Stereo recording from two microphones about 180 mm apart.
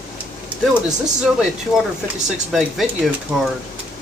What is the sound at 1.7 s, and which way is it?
Speech, centre (ahead or behind).